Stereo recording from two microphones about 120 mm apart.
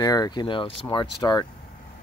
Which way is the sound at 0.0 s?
30° left (ahead or behind).